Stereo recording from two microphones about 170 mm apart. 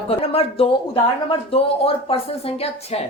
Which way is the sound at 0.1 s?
35° left (ahead or behind).